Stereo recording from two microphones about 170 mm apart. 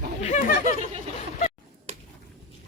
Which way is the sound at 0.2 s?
40° left (ahead or behind).